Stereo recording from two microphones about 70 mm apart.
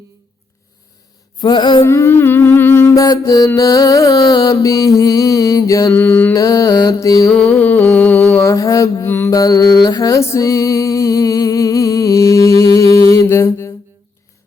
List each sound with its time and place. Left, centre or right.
1.4 s music: left
1.8 s humming: left
2.9 s music: left
5.9 s mantra: left
6.3 s music: left
7.3 s mantra: centre
7.6 s a sound: left
8.4 s mantra: left
9.0 s mantra: left
9.3 s music: left
10.2 s music: left